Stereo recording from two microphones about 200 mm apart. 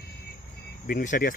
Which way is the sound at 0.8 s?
40° left (ahead or behind).